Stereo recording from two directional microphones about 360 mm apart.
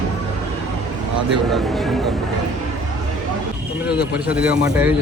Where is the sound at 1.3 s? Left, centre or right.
Centre.